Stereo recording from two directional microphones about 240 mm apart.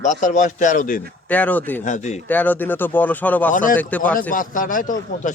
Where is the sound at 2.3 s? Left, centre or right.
Centre.